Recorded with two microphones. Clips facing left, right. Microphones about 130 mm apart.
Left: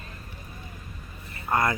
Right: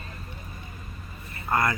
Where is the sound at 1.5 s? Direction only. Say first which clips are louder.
Even; 15° left (ahead or behind).